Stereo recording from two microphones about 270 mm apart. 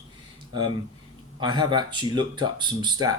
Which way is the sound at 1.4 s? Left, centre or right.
Centre.